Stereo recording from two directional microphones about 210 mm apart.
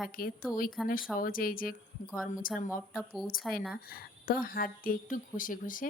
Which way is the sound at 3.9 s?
45° left (ahead or behind).